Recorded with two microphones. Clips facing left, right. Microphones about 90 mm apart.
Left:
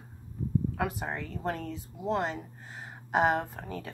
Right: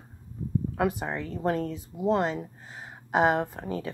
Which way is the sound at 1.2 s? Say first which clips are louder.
Right 6 dB; 30° right (ahead or behind).